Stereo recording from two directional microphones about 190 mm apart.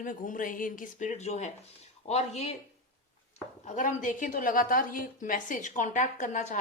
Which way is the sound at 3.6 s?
40° left (ahead or behind).